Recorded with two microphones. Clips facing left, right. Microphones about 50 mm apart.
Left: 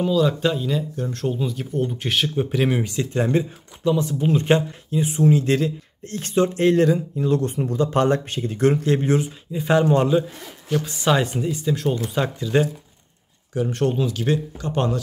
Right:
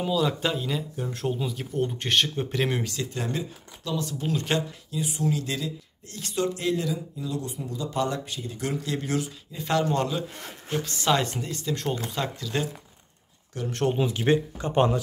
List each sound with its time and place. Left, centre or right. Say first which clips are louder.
0.0 s speech: left 6 dB; centre
2.8 s speech: left 8 dB; left
6.7 s speech: left 10 dB; left; by 13.7 s centre
13.9 s speech: left 1 dB; right